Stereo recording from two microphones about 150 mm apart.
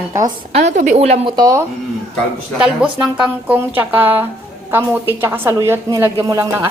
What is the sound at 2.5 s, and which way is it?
A woman's voice, 5° right (ahead or behind).